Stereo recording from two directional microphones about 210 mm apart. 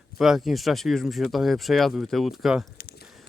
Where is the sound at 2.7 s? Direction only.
45° left (ahead or behind).